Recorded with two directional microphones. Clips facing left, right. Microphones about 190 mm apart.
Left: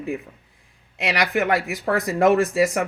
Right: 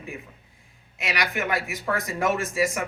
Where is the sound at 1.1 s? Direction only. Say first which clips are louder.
Left 6 dB; 60° left (ahead or behind).